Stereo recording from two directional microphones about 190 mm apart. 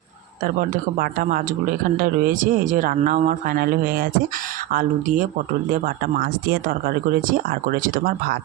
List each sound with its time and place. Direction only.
0.9 s speech: 50° right (ahead or behind)